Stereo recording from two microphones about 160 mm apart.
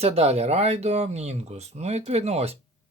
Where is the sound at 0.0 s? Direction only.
40° right (ahead or behind).